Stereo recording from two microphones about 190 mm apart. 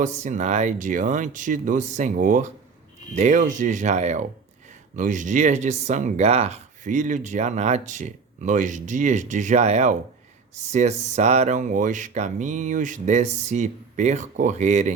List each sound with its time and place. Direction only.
0.0 s speech: 40° right (ahead or behind)